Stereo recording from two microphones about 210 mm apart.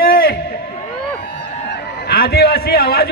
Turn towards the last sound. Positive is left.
turn(degrees=50)  # may be behind; listen again after turning